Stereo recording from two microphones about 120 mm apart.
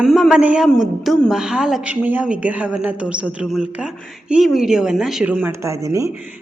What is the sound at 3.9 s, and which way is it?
A woman's voice, centre (ahead or behind).